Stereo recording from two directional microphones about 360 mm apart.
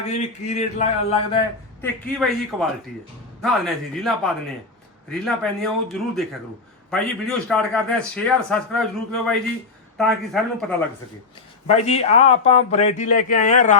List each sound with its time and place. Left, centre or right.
0.1 s a sound: centre
1.8 s a man's voice: centre
10.0 s a man's voice: centre
11.7 s a man's voice: centre